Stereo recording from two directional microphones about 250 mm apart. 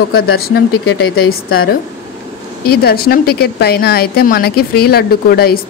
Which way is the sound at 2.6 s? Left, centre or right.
Left.